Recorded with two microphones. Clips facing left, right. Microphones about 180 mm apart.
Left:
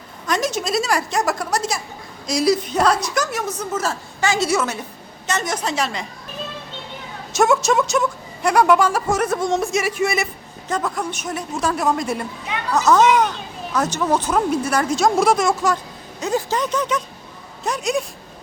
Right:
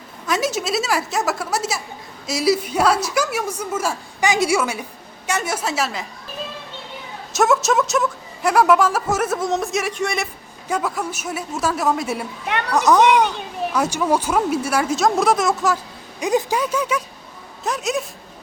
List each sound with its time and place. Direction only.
0.3 s a woman's voice: 5° right (ahead or behind)
7.3 s a woman's voice: centre (ahead or behind)
10.7 s a woman's voice: 10° right (ahead or behind)
12.5 s a woman's voice: 65° right (ahead or behind)
12.7 s a woman's voice: 15° right (ahead or behind)
16.2 s a woman's voice: 15° right (ahead or behind)